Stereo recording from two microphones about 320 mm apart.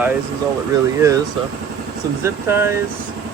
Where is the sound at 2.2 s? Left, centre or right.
Centre.